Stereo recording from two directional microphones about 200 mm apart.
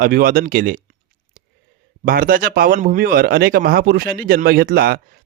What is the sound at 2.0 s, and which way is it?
Speech, 45° right (ahead or behind).